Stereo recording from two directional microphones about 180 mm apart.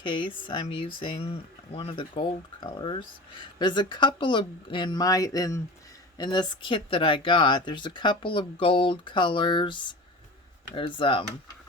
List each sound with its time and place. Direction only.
0.0 s speech: 25° left (ahead or behind)